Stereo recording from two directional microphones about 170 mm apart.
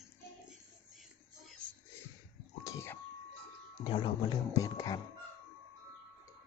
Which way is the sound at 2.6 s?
15° left (ahead or behind).